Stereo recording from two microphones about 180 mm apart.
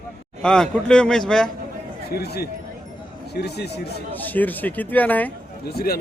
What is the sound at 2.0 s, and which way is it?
Speech, 60° left (ahead or behind).